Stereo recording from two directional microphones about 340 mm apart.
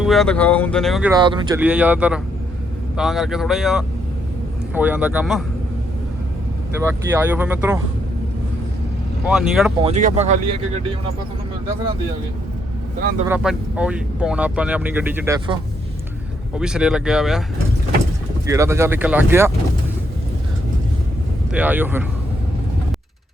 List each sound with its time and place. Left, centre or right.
0.0 s speech: centre
1.1 s speech: centre
6.7 s speech: centre
9.2 s speech: centre
9.8 s speech: right
13.2 s speech: centre
16.6 s speech: centre
18.4 s speech: centre
21.5 s speech: centre